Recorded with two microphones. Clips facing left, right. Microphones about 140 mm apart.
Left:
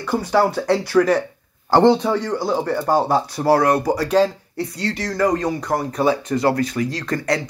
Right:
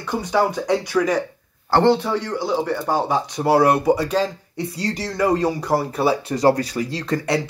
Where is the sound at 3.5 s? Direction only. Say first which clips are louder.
Even; 25° right (ahead or behind).